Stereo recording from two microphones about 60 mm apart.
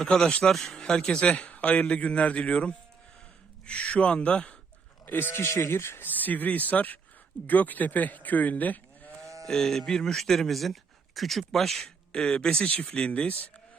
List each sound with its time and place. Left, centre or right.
0.0 s speech: centre
0.3 s speech: centre
5.0 s speech: left
5.3 s speech: left
6.1 s speech: left
9.2 s sheep: right
9.5 s a man's voice: centre; by 13.5 s left